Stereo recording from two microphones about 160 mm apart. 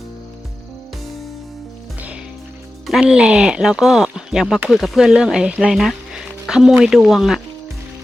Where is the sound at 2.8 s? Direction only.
5° right (ahead or behind).